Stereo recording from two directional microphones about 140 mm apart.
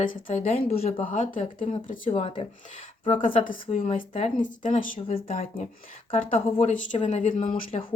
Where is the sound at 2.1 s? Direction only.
40° left (ahead or behind).